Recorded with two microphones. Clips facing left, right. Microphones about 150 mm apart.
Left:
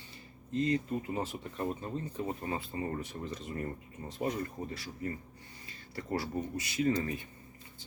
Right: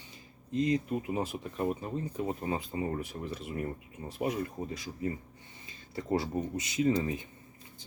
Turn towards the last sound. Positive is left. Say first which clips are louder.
# right 2 dB
turn(degrees=-20)  # may be behind; listen again after turning